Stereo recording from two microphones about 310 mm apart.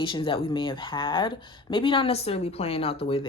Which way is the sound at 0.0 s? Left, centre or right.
Centre.